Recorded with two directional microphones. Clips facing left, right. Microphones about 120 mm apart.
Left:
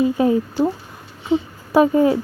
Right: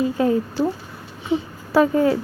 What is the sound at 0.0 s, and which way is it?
Speech, 20° left (ahead or behind).